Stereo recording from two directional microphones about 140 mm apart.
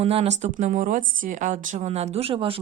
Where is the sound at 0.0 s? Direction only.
45° right (ahead or behind).